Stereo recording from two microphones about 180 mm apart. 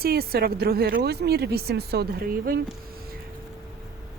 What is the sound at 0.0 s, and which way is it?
A woman's voice, 55° right (ahead or behind).